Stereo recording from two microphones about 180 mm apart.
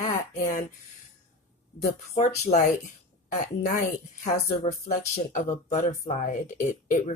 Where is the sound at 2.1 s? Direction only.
40° left (ahead or behind).